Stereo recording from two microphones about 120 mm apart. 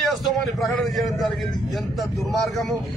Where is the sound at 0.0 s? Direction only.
Centre (ahead or behind).